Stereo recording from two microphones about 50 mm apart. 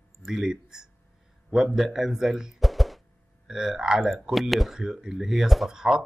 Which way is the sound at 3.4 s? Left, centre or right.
Centre.